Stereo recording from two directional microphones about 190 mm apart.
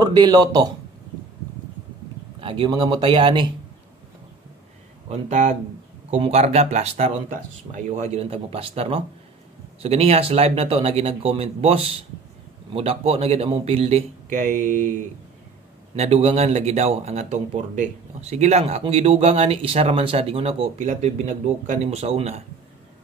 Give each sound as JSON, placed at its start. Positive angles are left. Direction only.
{"t": 0.0, "sound": "speech", "side_deg": -20}
{"t": 2.4, "sound": "speech", "side_deg": -25}
{"t": 5.1, "sound": "speech", "side_deg": -40}
{"t": 16.0, "sound": "speech", "side_deg": -35}